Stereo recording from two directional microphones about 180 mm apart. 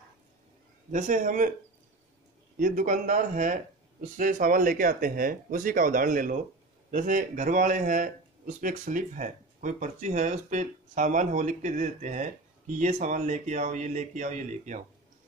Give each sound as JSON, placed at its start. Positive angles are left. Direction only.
{"t": 0.9, "sound": "speech", "side_deg": -45}
{"t": 2.6, "sound": "speech", "side_deg": -50}